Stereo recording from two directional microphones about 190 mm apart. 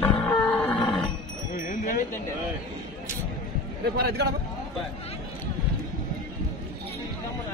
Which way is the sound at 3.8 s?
55° right (ahead or behind).